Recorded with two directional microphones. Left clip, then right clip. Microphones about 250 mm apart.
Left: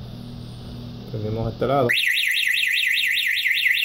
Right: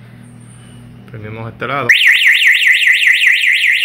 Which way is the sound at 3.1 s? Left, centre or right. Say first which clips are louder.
Right 10 dB; centre.